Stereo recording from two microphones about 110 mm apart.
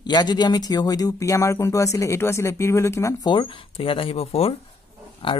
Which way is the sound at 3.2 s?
50° left (ahead or behind).